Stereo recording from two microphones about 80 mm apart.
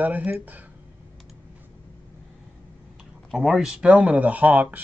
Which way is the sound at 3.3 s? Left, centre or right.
Centre.